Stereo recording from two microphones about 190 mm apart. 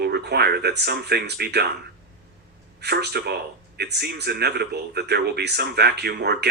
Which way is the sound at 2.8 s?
60° right (ahead or behind).